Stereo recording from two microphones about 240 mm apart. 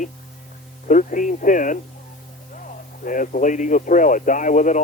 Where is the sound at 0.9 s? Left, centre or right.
Left.